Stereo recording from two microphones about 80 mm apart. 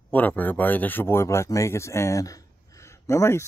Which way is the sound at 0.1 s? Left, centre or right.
Left.